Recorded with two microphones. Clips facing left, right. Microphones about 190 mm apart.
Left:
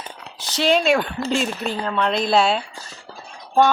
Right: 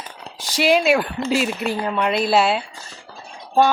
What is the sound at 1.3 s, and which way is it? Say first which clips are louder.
Speech: right 3 dB; 5° right (ahead or behind).